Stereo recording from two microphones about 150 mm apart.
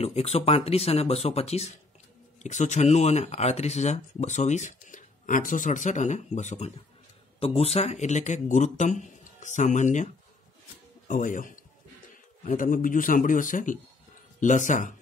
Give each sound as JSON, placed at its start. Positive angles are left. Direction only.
{"t": 0.0, "sound": "speech", "side_deg": 45}
{"t": 11.1, "sound": "a man's voice", "side_deg": 60}